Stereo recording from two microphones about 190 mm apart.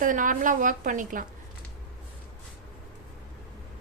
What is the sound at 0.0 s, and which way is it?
A woman's voice, 45° right (ahead or behind).